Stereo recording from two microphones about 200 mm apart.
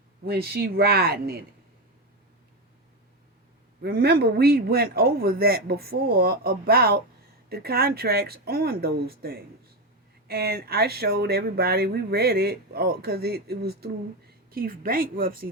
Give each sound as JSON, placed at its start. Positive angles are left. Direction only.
{"t": 0.3, "sound": "speech", "side_deg": -50}
{"t": 3.8, "sound": "speech", "side_deg": -50}